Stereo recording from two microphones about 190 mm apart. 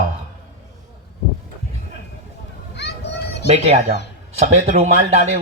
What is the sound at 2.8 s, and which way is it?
Children playing, 65° left (ahead or behind).